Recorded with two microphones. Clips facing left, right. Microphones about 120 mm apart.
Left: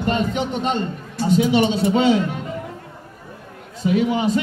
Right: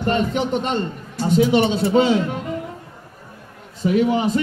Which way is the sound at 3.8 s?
45° right (ahead or behind).